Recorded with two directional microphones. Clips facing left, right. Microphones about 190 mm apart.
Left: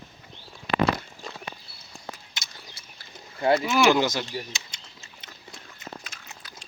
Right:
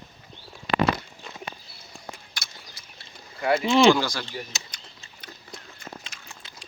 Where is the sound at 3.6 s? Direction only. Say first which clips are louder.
Right 6 dB; 25° right (ahead or behind).